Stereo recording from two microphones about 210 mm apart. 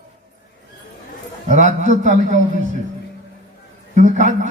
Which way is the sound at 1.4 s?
35° right (ahead or behind).